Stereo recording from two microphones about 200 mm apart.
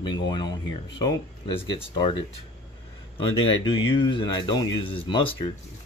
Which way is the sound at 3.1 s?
25° left (ahead or behind).